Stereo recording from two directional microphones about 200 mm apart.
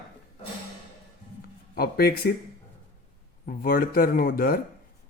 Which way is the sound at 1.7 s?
50° left (ahead or behind).